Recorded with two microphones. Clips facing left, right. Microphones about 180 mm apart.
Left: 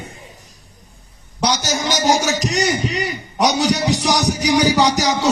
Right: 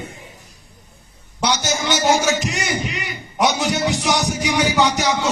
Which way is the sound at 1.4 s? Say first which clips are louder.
Left 1 dB; 40° left (ahead or behind).